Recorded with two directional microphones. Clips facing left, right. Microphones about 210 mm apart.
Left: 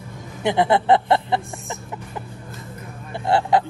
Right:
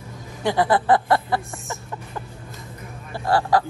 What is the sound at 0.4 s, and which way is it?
Speech, 20° left (ahead or behind).